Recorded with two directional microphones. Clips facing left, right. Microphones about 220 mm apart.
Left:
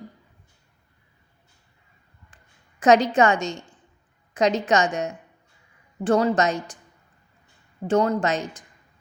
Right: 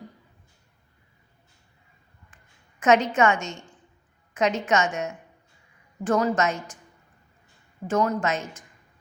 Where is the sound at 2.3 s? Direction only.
35° left (ahead or behind).